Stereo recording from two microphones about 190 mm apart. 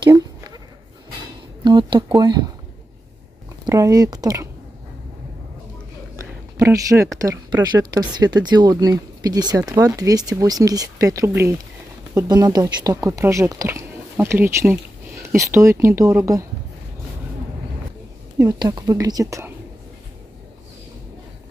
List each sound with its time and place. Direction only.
0.0 s a sound: 20° right (ahead or behind)
1.6 s speech: 25° right (ahead or behind)
3.6 s speech: 15° right (ahead or behind)
6.6 s speech: 15° right (ahead or behind)
18.4 s speech: 15° right (ahead or behind)